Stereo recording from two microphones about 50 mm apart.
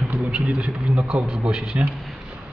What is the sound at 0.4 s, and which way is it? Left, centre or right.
Speech, right.